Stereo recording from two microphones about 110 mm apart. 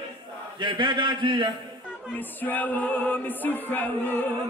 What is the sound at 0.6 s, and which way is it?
Speech, 45° right (ahead or behind).